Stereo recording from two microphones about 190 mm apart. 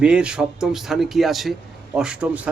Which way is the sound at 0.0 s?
5° right (ahead or behind).